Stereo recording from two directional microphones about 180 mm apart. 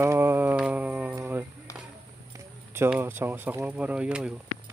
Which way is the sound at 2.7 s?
10° right (ahead or behind).